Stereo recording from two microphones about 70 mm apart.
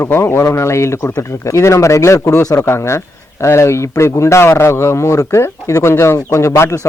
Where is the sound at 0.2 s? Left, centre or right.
Left.